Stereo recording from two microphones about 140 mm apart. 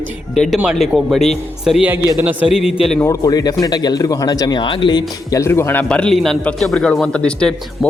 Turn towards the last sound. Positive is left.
turn(degrees=5)  # may be behind; listen again after turning